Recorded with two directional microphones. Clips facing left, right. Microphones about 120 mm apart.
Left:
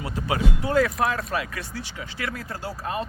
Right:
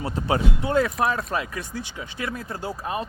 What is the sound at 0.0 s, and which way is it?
Speech, 30° right (ahead or behind).